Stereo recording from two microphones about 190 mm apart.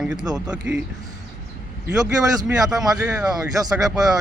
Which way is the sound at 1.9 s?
20° right (ahead or behind).